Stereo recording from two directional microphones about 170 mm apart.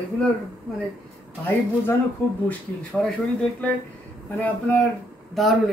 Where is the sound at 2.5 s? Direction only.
5° left (ahead or behind).